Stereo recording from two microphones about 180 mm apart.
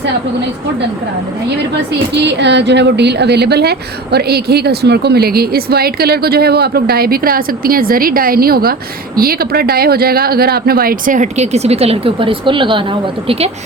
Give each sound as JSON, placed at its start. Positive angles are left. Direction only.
{"t": 2.2, "sound": "a woman's voice", "side_deg": -70}